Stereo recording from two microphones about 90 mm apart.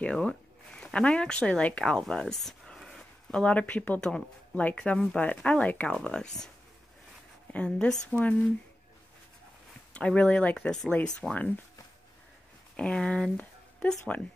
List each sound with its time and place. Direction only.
0.0 s speech: 10° left (ahead or behind)
7.5 s speech: 15° left (ahead or behind)
9.9 s speech: 10° left (ahead or behind)
12.7 s speech: 10° left (ahead or behind)